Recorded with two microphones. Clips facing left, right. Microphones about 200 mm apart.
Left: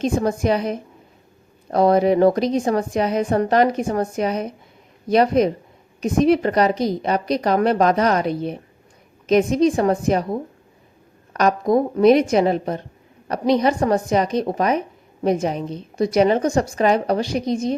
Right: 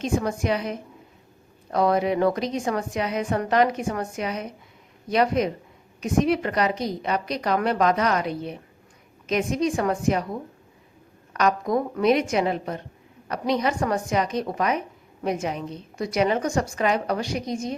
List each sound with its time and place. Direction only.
0.0 s a woman's voice: 35° left (ahead or behind)